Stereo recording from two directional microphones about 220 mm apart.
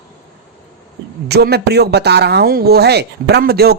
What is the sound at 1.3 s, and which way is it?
Speech, 45° right (ahead or behind).